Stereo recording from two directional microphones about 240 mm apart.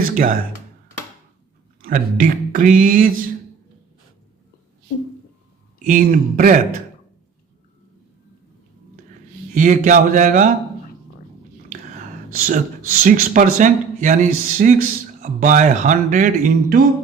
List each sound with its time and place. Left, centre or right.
0.0 s speech: right
1.8 s speech: right
5.8 s speech: right
9.6 s speech: right
12.5 s speech: right